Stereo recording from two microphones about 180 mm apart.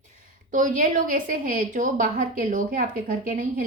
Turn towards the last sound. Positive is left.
turn(degrees=-50)  # may be behind; listen again after turning